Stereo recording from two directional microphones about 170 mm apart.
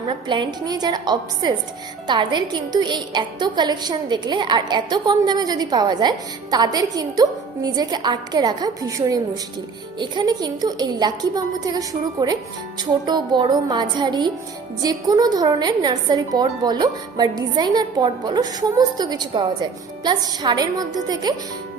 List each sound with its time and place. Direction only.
0.1 s a woman's voice: 30° right (ahead or behind)